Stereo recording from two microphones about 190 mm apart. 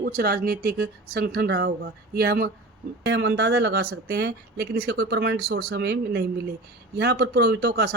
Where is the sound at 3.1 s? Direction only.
65° right (ahead or behind).